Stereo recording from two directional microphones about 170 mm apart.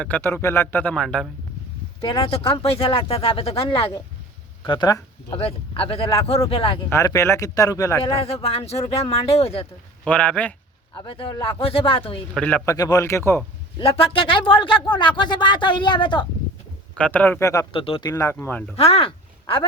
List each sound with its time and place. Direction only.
0.0 s a man's voice: 10° left (ahead or behind)
2.0 s speech: 30° left (ahead or behind)
6.9 s speech: 20° left (ahead or behind)
8.0 s speech: 35° left (ahead or behind)
10.0 s a man's voice: 10° left (ahead or behind)
10.9 s speech: 30° left (ahead or behind)
12.3 s speech: 5° left (ahead or behind)
12.6 s a man's voice: 20° left (ahead or behind)
13.7 s speech: 35° left (ahead or behind)
16.9 s a man's voice: 10° left (ahead or behind)
17.7 s speech: 30° left (ahead or behind)
18.1 s a man's voice: 15° left (ahead or behind)
18.8 s speech: 35° left (ahead or behind)